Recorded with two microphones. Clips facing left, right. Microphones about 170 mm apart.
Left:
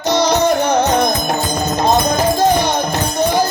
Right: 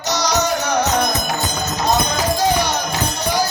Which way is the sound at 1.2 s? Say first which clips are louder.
Left 5 dB; 55° left (ahead or behind).